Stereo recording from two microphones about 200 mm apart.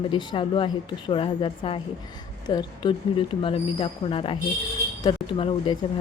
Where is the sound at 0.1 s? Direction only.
25° left (ahead or behind).